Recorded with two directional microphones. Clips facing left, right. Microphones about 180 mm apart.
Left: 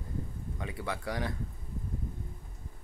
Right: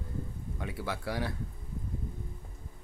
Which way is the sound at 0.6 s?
5° right (ahead or behind).